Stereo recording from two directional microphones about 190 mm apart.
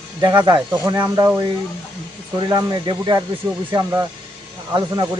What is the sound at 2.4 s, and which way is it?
Speech, 25° right (ahead or behind).